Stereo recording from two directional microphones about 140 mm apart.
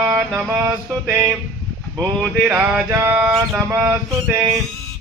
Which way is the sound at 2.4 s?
15° right (ahead or behind).